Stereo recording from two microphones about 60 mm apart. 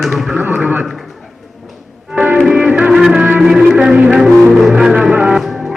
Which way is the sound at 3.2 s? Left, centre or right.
Right.